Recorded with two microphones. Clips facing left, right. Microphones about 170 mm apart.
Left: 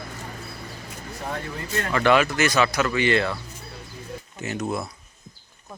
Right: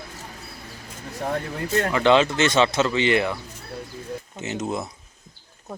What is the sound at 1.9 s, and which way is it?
Speech, 20° right (ahead or behind).